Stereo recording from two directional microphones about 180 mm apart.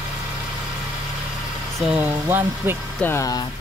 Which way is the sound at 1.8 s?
5° right (ahead or behind).